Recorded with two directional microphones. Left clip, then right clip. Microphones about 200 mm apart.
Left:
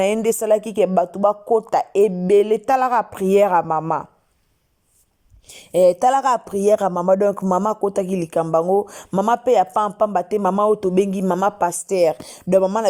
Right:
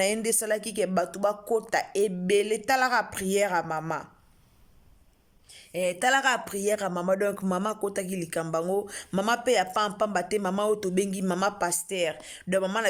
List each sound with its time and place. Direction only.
0.0 s a woman's voice: 10° left (ahead or behind)
5.5 s a sound: 50° left (ahead or behind)
6.0 s a woman's voice: 15° left (ahead or behind)
11.9 s a woman's voice: 25° left (ahead or behind)